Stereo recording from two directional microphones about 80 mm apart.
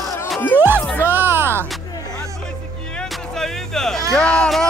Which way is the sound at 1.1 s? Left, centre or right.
Right.